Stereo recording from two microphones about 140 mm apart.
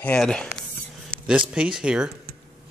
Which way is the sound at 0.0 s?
10° left (ahead or behind).